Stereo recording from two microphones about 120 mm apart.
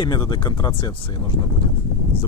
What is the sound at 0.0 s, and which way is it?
Speech, 40° left (ahead or behind).